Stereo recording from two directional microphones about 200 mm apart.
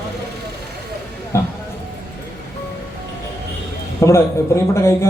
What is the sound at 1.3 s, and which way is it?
Speech, 15° left (ahead or behind).